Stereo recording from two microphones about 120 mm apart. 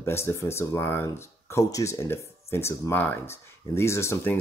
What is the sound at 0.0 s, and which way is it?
Speech, 20° left (ahead or behind).